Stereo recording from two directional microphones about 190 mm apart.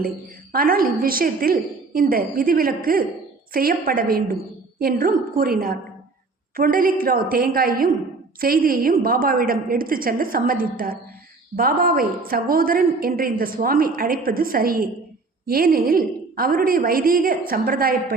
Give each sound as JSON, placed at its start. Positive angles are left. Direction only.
{"t": 0.5, "sound": "a woman's voice", "side_deg": -50}